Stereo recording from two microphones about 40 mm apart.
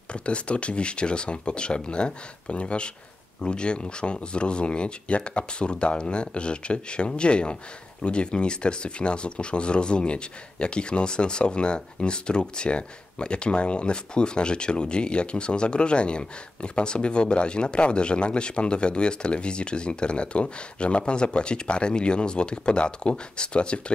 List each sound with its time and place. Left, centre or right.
0.1 s speech: left